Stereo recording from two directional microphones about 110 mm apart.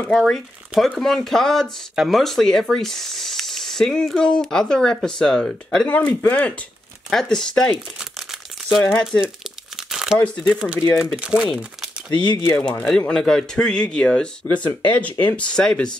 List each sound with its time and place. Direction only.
0.1 s speech: centre (ahead or behind)
7.1 s speech: 5° left (ahead or behind)
9.8 s crumpling: 5° right (ahead or behind)
10.4 s speech: 5° right (ahead or behind)
12.1 s speech: 45° left (ahead or behind)
12.4 s speech: 15° left (ahead or behind)
13.1 s speech: 5° left (ahead or behind)